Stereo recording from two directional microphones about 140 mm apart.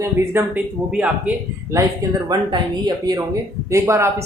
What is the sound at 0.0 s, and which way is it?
Speech, 15° right (ahead or behind).